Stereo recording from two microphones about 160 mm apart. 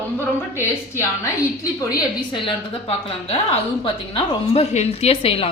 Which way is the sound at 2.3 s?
35° left (ahead or behind).